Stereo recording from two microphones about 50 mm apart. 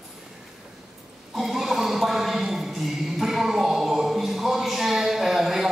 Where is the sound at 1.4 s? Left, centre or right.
Centre.